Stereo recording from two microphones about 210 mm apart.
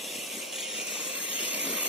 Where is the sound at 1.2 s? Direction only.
60° right (ahead or behind).